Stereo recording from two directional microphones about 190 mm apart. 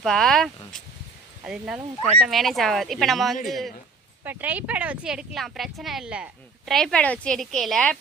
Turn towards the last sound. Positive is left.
turn(degrees=5)  # may be behind; listen again after turning